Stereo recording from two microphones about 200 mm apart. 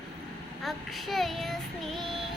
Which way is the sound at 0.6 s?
Centre (ahead or behind).